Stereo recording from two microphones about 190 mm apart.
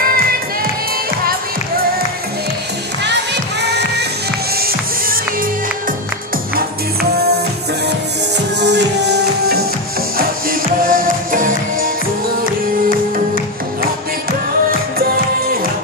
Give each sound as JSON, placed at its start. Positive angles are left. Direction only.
{"t": 3.1, "sound": "music", "side_deg": -65}
{"t": 6.5, "sound": "music", "side_deg": -55}
{"t": 8.5, "sound": "music", "side_deg": -65}
{"t": 10.8, "sound": "music", "side_deg": -50}